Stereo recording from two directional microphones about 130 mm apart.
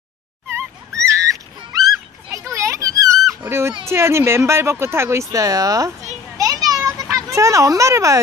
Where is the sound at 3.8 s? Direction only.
20° right (ahead or behind).